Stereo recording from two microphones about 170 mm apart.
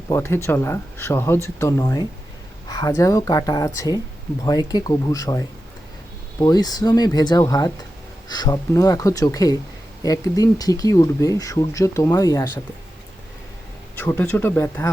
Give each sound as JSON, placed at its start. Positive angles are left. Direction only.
{"t": 0.1, "sound": "speech", "side_deg": 15}
{"t": 14.0, "sound": "speech", "side_deg": 10}